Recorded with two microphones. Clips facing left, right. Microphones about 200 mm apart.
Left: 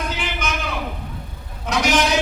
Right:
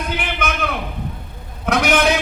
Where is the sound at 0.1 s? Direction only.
60° right (ahead or behind).